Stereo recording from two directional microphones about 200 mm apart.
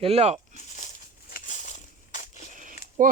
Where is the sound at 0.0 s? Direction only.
30° right (ahead or behind).